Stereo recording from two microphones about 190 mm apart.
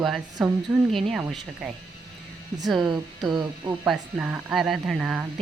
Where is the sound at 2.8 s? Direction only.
20° right (ahead or behind).